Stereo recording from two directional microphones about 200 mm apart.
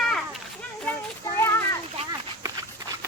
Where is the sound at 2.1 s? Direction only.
20° right (ahead or behind).